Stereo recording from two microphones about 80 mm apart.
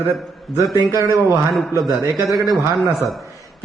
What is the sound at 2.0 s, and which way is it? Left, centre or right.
Speech, right.